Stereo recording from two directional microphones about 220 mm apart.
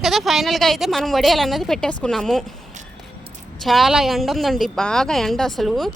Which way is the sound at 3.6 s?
Centre (ahead or behind).